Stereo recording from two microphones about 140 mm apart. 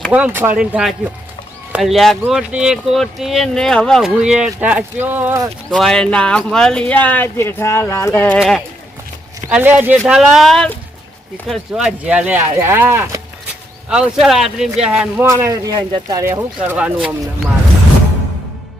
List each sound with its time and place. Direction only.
0.1 s speech: 15° right (ahead or behind)
5.7 s speech: 5° left (ahead or behind)
8.4 s speech: centre (ahead or behind)
10.1 s speech: centre (ahead or behind)
13.9 s speech: 5° right (ahead or behind); by 16.4 s 20° right (ahead or behind)
16.6 s speech: 10° right (ahead or behind)